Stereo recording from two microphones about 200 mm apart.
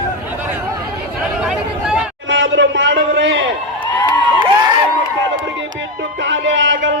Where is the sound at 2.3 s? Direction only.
65° right (ahead or behind).